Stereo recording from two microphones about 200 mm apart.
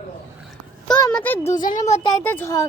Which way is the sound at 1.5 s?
40° left (ahead or behind).